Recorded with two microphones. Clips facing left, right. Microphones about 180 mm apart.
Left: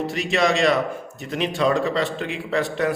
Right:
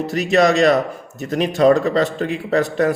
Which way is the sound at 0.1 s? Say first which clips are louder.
Right 8 dB; 40° right (ahead or behind).